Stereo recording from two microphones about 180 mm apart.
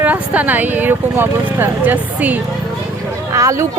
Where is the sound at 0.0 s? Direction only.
10° right (ahead or behind).